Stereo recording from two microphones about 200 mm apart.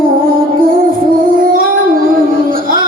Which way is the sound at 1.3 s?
45° right (ahead or behind).